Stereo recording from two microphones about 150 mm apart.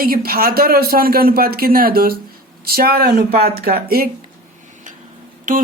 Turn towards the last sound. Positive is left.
turn(degrees=-60)  # may be behind; listen again after turning